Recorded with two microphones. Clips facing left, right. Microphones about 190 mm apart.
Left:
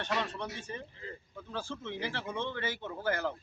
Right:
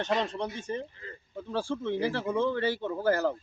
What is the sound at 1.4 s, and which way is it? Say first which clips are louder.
Speech: right 9 dB; 35° right (ahead or behind).